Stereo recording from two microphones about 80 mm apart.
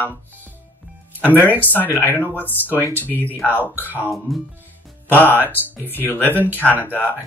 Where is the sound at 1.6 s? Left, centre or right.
Left.